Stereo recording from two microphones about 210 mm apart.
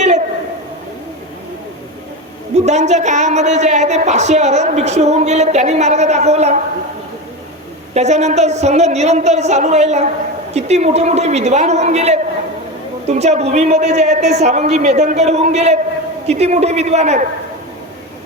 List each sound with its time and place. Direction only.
2.6 s a woman's voice: 30° right (ahead or behind)
7.9 s a woman's voice: 30° right (ahead or behind)